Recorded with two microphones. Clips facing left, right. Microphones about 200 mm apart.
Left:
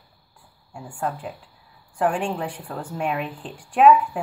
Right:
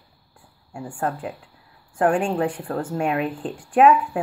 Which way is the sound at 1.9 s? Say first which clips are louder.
Right 4 dB; 45° right (ahead or behind).